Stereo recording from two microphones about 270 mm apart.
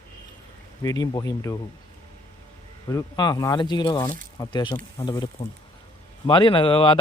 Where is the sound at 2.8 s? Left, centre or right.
Centre.